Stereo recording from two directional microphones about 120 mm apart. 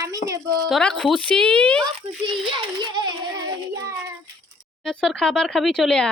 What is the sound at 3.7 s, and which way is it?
Child singing, 30° right (ahead or behind).